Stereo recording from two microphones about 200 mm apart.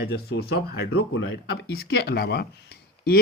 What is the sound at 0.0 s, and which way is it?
Speech, 55° left (ahead or behind).